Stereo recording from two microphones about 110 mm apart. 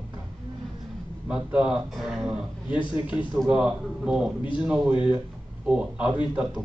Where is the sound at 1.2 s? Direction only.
10° right (ahead or behind).